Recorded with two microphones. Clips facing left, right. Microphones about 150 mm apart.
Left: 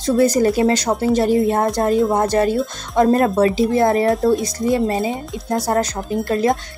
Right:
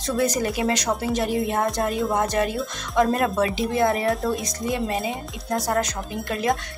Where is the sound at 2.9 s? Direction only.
45° left (ahead or behind).